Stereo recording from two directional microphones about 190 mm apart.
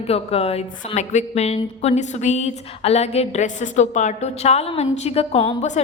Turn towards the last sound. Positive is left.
turn(degrees=35)  # may be behind; listen again after turning